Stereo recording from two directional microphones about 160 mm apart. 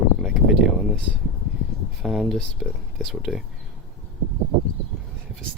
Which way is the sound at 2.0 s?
5° right (ahead or behind).